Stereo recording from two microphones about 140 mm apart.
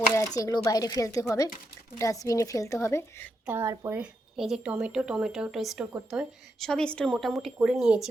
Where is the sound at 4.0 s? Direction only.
5° right (ahead or behind).